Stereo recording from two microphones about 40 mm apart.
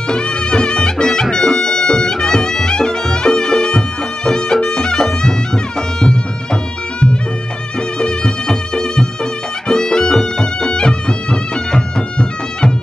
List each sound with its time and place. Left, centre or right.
0.1 s music: left